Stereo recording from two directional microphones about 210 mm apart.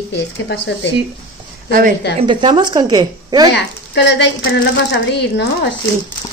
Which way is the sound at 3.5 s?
55° left (ahead or behind).